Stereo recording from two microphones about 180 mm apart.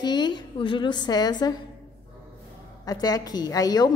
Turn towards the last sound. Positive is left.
turn(degrees=20)  # may be behind; listen again after turning